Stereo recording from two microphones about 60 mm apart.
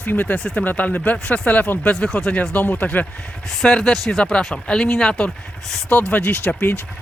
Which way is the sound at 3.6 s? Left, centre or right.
Centre.